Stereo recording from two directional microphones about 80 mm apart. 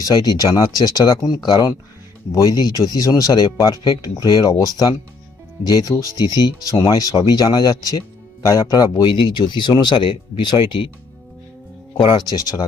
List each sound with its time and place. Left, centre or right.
0.0 s speech: left
2.3 s speech: left
6.7 s speech: left
7.0 s speech: left
11.9 s speech: left